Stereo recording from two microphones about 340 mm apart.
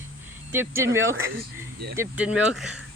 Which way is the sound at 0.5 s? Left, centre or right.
Centre.